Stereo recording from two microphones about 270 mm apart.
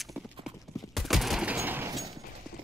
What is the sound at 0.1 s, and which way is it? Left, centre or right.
Clip-clop, centre.